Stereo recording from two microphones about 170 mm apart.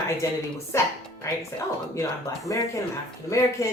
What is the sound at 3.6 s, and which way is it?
Speech, 20° left (ahead or behind).